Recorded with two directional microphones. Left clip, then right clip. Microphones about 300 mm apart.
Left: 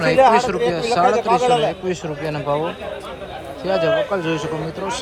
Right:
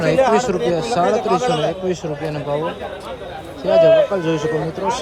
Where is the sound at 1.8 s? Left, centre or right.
Centre.